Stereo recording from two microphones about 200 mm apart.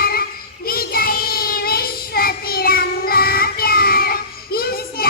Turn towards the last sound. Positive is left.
turn(degrees=50)  # may be behind; listen again after turning